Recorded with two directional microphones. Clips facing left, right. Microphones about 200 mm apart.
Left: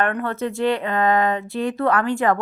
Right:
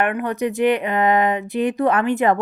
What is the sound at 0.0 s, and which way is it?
Speech, 15° right (ahead or behind).